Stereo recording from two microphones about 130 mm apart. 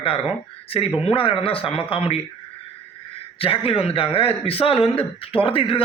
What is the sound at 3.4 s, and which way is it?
A man's voice, 45° left (ahead or behind).